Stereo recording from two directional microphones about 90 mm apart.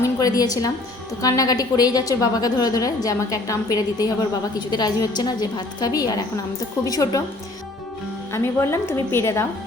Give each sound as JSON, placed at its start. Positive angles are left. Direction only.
{"t": 0.0, "sound": "a woman's voice", "side_deg": 40}
{"t": 8.3, "sound": "a woman's voice", "side_deg": 30}